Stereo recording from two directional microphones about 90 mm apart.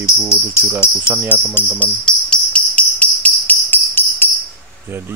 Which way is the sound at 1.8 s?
15° left (ahead or behind).